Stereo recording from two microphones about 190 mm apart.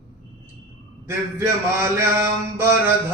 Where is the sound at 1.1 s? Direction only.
15° right (ahead or behind).